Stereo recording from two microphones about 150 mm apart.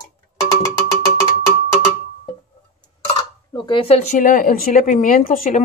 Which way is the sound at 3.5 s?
35° left (ahead or behind).